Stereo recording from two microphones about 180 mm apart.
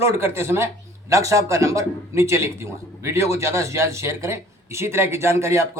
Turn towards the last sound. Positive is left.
turn(degrees=-15)  # may be behind; listen again after turning